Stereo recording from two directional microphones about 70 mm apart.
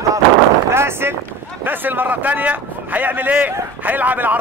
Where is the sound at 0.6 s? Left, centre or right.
Right.